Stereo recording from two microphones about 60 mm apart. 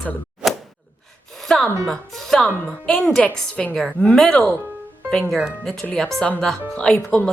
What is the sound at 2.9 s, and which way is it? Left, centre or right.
Speech, centre.